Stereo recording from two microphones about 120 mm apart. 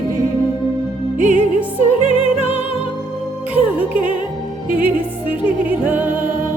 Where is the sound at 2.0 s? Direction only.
90° right.